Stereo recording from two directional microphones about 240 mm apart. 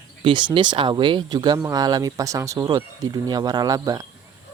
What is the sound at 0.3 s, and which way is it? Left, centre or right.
Speech, centre.